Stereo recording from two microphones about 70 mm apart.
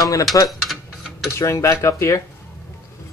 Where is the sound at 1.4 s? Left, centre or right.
Left.